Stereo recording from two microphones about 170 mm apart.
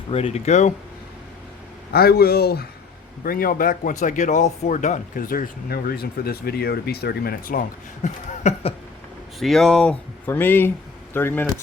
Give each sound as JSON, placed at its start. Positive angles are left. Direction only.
{"t": 0.1, "sound": "speech", "side_deg": 35}
{"t": 1.9, "sound": "speech", "side_deg": 65}
{"t": 8.0, "sound": "a sound", "side_deg": 40}
{"t": 9.4, "sound": "speech", "side_deg": 0}